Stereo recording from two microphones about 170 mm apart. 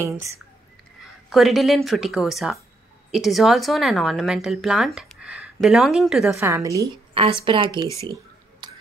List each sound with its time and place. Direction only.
1.3 s a woman's voice: centre (ahead or behind)
6.3 s a woman's voice: 15° right (ahead or behind)
7.2 s a woman's voice: 30° right (ahead or behind)
8.6 s a sound: 25° right (ahead or behind)